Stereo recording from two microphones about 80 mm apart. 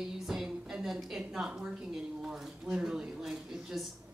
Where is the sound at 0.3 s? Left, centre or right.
Centre.